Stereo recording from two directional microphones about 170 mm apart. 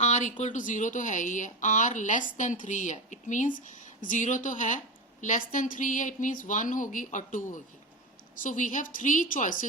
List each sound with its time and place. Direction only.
0.0 s speech: 45° left (ahead or behind)